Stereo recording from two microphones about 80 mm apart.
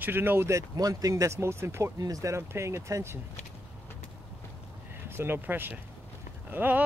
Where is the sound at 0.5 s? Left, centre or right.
Right.